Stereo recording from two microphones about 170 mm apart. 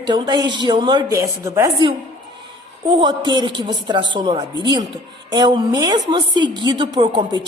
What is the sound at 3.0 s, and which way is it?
A woman's voice, 25° right (ahead or behind).